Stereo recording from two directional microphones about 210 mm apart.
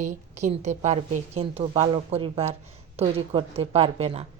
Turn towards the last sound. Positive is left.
turn(degrees=-30)  # may be behind; listen again after turning